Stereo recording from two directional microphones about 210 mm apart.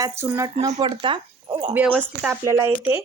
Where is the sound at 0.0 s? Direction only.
10° right (ahead or behind).